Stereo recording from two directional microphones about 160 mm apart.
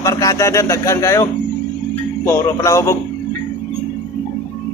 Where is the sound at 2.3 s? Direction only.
20° left (ahead or behind).